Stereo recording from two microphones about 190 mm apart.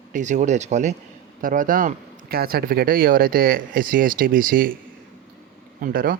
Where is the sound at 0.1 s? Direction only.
40° right (ahead or behind).